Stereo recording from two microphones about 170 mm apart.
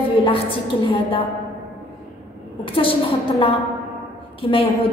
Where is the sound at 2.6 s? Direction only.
30° left (ahead or behind).